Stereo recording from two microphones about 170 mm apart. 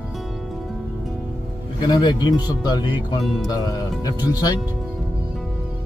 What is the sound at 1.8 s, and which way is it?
Speech, 25° left (ahead or behind).